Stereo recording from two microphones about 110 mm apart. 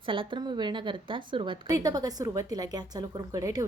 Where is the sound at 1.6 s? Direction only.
35° right (ahead or behind).